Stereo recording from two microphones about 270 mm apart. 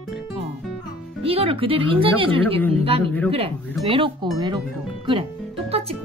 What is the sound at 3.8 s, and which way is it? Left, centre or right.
Speech, centre.